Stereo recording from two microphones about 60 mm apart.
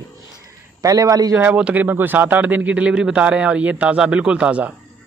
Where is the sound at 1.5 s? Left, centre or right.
Right.